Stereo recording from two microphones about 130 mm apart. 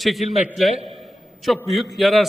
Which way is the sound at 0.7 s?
50° right (ahead or behind).